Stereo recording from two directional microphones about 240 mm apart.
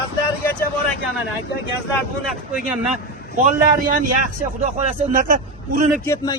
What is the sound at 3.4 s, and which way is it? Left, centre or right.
A man's voice, right.